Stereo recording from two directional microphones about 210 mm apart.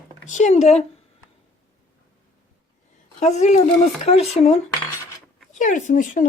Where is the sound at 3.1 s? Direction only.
35° left (ahead or behind).